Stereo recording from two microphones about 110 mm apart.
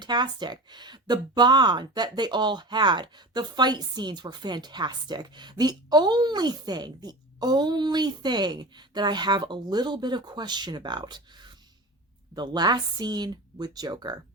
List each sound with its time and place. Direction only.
0.0 s speech: 40° right (ahead or behind)